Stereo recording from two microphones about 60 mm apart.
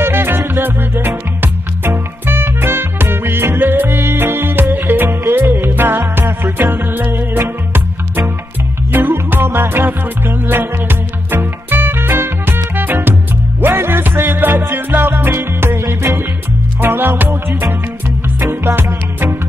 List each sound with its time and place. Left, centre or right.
0.0 s music: right
8.9 s music: right